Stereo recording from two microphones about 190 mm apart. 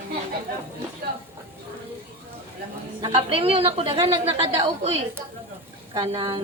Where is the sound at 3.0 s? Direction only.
30° right (ahead or behind).